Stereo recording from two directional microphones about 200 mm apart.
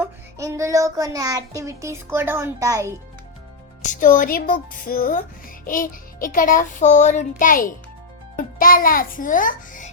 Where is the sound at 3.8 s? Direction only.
40° left (ahead or behind).